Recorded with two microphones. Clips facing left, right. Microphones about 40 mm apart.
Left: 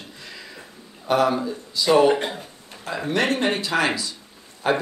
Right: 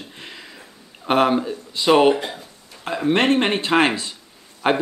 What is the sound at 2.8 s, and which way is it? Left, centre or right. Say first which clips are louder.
Speech: right 4 dB; right.